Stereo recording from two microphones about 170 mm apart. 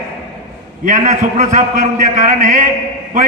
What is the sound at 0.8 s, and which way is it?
A man's voice, 50° right (ahead or behind).